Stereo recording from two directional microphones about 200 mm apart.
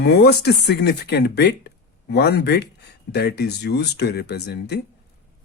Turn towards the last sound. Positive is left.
turn(degrees=55)  # may be behind; listen again after turning